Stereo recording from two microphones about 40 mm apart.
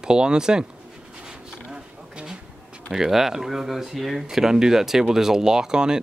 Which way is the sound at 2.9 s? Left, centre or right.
Centre.